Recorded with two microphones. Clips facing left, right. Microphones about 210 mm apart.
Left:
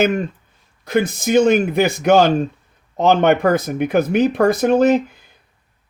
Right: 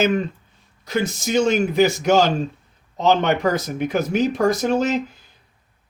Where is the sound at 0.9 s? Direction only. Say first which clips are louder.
Left 5 dB; 55° left (ahead or behind).